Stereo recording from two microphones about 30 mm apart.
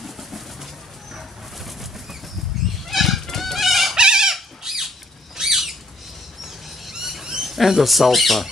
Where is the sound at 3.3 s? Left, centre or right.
Centre.